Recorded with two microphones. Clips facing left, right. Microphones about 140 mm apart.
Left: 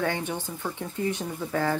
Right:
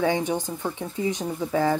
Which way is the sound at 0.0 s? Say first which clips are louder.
Right 5 dB; 15° right (ahead or behind).